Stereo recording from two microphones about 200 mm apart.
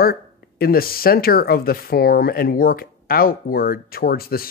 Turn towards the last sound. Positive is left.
turn(degrees=50)  # may be behind; listen again after turning